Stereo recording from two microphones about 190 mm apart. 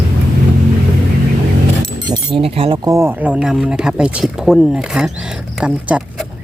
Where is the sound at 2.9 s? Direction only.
15° right (ahead or behind).